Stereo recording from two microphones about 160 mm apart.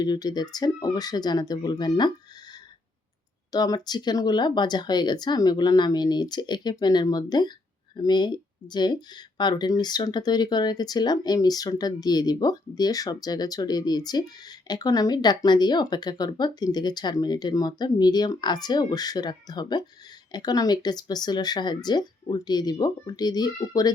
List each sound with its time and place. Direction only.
0.0 s speech: 25° left (ahead or behind)